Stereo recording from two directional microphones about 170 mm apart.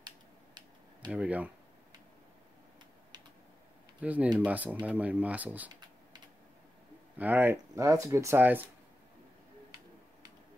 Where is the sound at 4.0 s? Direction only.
10° right (ahead or behind).